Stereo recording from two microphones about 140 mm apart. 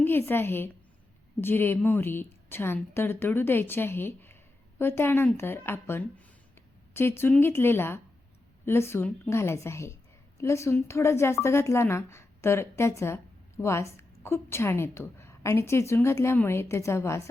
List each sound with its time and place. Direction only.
0.0 s a woman's voice: 15° left (ahead or behind)